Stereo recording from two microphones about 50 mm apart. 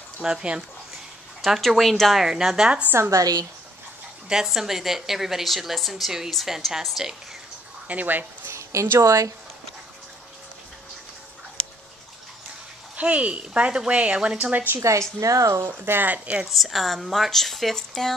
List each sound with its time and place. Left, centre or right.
0.2 s speech: centre
1.4 s a woman's voice: centre
2.1 s speech: centre
3.0 s speech: right
4.5 s a woman's voice: centre
7.9 s speech: right
8.5 s a sound: right
9.0 s speech: right
12.9 s speech: right
14.5 s speech: right
14.8 s speech: right
15.6 s speech: right
16.4 s a woman's voice: centre